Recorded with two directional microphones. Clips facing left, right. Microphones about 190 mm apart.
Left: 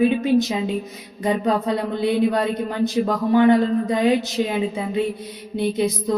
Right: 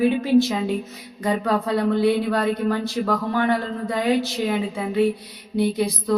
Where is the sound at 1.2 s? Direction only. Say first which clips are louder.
Left 2 dB; 20° left (ahead or behind).